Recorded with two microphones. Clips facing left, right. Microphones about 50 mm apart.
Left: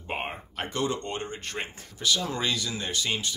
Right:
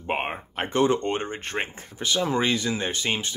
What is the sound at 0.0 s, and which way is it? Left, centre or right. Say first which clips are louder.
Speech: right 5 dB; right.